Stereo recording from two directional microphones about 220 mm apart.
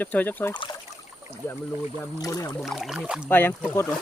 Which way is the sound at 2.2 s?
15° left (ahead or behind).